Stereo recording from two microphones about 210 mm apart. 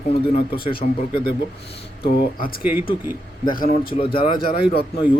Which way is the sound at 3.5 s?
40° left (ahead or behind).